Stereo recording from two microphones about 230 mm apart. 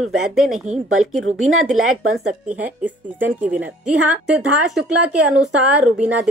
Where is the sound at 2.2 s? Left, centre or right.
Centre.